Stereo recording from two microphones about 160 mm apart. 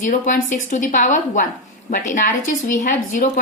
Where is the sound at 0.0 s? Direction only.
50° left (ahead or behind).